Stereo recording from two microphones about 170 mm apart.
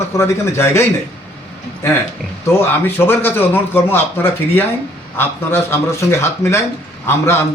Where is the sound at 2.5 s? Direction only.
15° left (ahead or behind).